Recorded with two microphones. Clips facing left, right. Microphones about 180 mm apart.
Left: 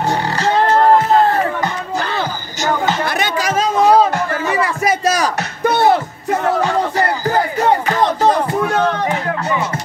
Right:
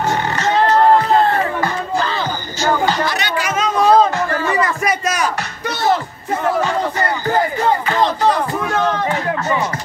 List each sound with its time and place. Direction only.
0.4 s beatboxing: 25° left (ahead or behind)
3.2 s chatter: 35° left (ahead or behind)
3.7 s music: 10° left (ahead or behind)
5.0 s music: 35° left (ahead or behind)
5.6 s music: 55° left (ahead or behind)